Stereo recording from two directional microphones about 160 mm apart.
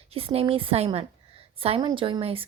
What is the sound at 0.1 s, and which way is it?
A woman's voice, 35° right (ahead or behind).